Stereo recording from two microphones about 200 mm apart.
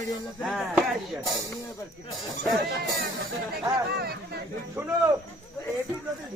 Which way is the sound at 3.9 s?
50° right (ahead or behind).